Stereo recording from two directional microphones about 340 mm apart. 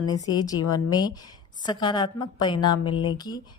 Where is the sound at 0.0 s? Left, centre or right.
Centre.